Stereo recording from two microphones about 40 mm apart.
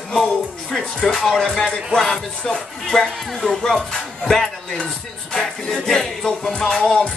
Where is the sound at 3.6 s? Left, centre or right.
Left.